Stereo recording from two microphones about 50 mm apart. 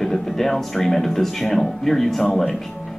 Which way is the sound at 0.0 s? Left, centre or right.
Centre.